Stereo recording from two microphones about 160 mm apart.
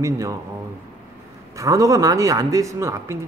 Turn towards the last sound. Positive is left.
turn(degrees=-20)  # may be behind; listen again after turning